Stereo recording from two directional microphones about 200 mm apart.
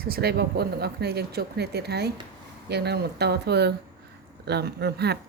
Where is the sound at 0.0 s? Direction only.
50° right (ahead or behind).